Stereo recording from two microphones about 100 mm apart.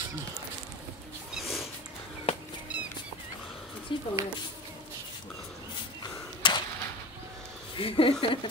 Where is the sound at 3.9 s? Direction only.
55° left (ahead or behind).